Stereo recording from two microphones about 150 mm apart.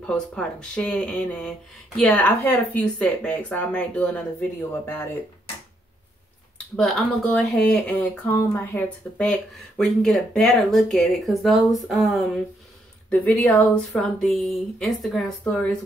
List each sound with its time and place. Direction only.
0.0 s speech: 5° left (ahead or behind)
6.8 s speech: centre (ahead or behind)